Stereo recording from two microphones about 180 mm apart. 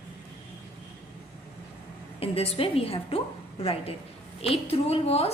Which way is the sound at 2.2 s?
35° left (ahead or behind).